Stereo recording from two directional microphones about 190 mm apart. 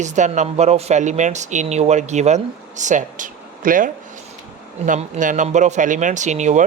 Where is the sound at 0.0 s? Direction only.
40° right (ahead or behind).